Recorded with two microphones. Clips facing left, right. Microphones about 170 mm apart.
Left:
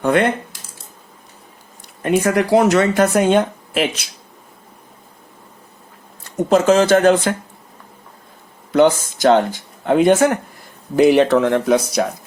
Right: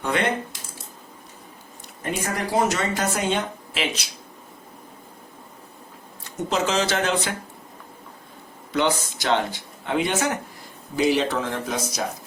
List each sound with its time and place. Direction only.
0.0 s speech: 50° left (ahead or behind)
2.0 s speech: 70° left (ahead or behind); by 4.0 s 50° left (ahead or behind)
6.5 s speech: 50° left (ahead or behind)
8.7 s speech: 45° left (ahead or behind); by 12.0 s 65° left (ahead or behind)